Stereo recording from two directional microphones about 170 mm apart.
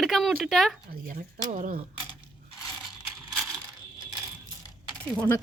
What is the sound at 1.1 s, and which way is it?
Speech, 50° right (ahead or behind).